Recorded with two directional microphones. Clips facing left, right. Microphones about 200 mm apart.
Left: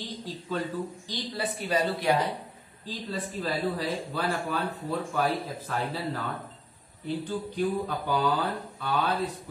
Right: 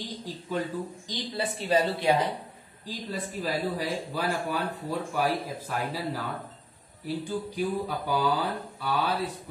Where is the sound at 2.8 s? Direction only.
10° right (ahead or behind).